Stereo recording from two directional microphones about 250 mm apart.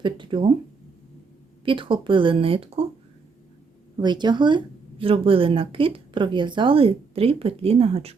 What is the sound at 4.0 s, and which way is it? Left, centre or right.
Speech, centre.